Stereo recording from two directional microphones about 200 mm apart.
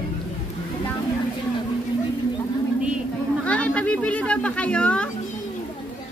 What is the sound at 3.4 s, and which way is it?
Speech, 5° left (ahead or behind).